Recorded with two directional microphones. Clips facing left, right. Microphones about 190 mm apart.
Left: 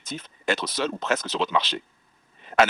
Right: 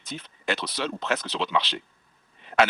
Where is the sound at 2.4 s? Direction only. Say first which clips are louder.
Left 1 dB; 40° left (ahead or behind).